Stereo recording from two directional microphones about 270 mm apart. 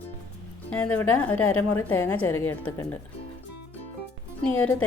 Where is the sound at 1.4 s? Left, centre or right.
Left.